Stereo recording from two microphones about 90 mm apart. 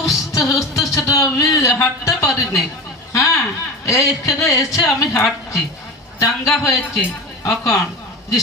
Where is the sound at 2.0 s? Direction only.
35° left (ahead or behind).